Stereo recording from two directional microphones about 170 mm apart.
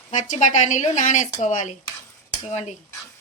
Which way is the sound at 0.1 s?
45° left (ahead or behind).